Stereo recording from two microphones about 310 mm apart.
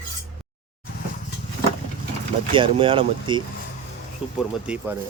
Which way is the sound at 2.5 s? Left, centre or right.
Centre.